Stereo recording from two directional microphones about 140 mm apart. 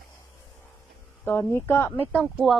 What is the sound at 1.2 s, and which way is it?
Speech, 15° left (ahead or behind).